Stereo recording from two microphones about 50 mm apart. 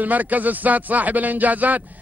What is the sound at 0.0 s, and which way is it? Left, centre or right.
Speech, right.